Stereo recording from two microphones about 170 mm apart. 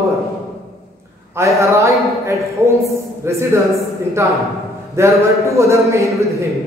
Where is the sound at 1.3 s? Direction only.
15° right (ahead or behind).